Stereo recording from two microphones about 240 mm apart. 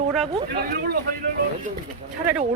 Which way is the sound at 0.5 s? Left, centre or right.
Right.